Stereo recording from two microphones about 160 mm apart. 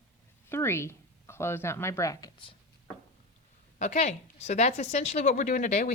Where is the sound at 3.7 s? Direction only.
45° left (ahead or behind).